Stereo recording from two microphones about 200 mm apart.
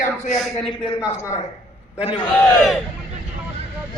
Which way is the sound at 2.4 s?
Centre (ahead or behind).